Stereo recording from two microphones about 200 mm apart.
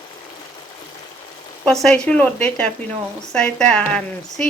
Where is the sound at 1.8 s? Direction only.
5° left (ahead or behind).